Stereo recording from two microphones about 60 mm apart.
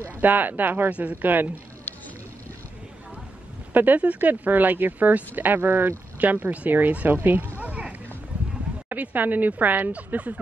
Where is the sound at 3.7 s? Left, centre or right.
Right.